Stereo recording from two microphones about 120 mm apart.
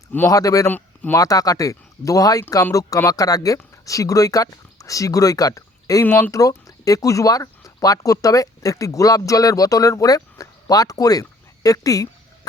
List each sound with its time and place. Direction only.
0.3 s speech: 30° left (ahead or behind)
6.1 s speech: 15° left (ahead or behind)
6.3 s speech: 30° left (ahead or behind)